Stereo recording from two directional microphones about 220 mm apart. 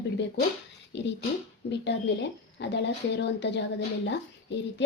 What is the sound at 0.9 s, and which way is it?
A woman's voice, 55° left (ahead or behind).